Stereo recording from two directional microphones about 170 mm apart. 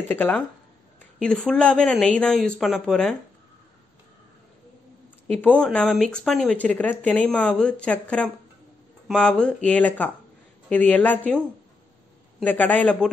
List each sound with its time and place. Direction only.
0.1 s speech: 10° left (ahead or behind)
5.4 s speech: 5° left (ahead or behind)